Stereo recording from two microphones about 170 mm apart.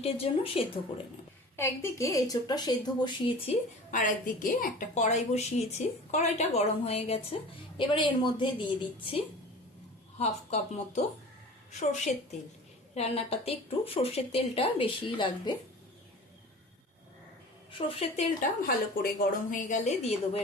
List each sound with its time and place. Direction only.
0.0 s a woman's voice: 35° left (ahead or behind)
1.5 s a woman's voice: 15° left (ahead or behind)
3.9 s a woman's voice: 50° left (ahead or behind); by 15.5 s 30° left (ahead or behind)
17.7 s a woman's voice: 30° left (ahead or behind)
18.3 s a woman's voice: 60° left (ahead or behind); by 20.4 s 40° left (ahead or behind)